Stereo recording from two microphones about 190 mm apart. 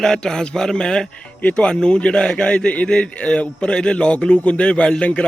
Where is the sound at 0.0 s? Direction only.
5° left (ahead or behind).